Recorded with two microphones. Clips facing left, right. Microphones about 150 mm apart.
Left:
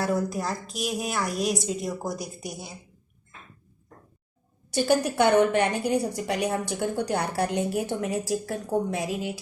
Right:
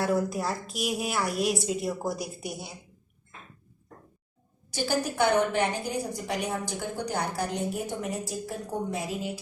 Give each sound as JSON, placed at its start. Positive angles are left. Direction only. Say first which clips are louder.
{"t": 0.0, "sound": "a woman's voice", "louder": "even", "side_deg": 0}
{"t": 4.7, "sound": "a woman's voice", "louder": "left 6 dB", "side_deg": 65}